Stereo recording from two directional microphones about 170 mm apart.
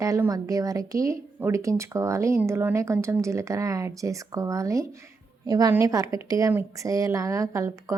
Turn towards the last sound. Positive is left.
turn(degrees=-20)  # may be behind; listen again after turning